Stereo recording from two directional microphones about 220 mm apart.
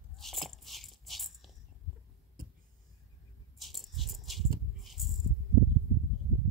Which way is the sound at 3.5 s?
Centre (ahead or behind).